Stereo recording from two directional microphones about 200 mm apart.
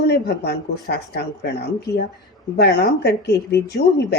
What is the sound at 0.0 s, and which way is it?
A woman's voice, 55° left (ahead or behind).